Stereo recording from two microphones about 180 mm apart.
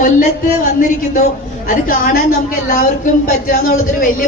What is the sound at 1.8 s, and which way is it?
A woman's voice, 55° left (ahead or behind).